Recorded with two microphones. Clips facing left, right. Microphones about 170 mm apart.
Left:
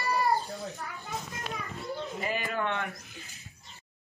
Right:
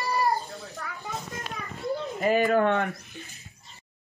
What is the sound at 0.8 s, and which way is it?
Speech, 90° right.